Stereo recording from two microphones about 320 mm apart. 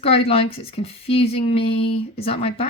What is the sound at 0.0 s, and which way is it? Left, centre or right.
A woman's voice, centre.